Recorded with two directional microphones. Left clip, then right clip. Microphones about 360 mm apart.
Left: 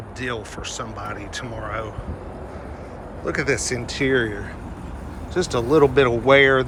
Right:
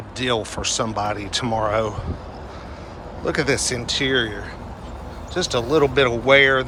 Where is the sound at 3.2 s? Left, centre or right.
Centre.